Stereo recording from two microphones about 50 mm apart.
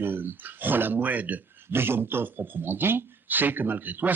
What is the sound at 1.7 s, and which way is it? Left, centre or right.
Speech, right.